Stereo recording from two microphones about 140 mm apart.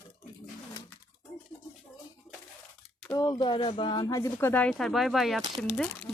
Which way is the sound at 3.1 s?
30° left (ahead or behind).